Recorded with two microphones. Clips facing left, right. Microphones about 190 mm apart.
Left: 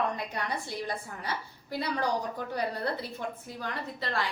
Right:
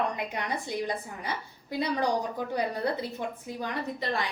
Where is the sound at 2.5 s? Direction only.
15° right (ahead or behind).